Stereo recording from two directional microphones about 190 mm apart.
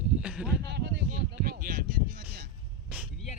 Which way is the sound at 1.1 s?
50° right (ahead or behind).